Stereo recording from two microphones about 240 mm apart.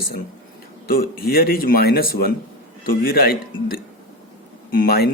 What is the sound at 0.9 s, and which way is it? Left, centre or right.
Speech, left.